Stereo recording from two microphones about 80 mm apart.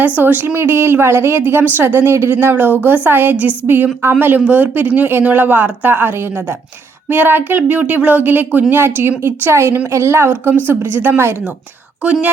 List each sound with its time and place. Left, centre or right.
0.0 s a woman's voice: right